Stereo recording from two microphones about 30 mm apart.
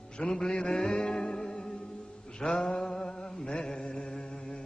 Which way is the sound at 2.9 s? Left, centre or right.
Left.